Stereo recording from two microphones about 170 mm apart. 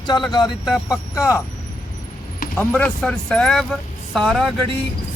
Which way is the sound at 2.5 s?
5° left (ahead or behind).